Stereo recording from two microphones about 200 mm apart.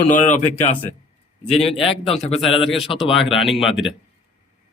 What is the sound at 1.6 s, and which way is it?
A man's voice, 30° left (ahead or behind).